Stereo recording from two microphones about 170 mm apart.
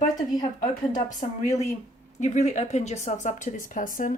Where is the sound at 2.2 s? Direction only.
45° left (ahead or behind).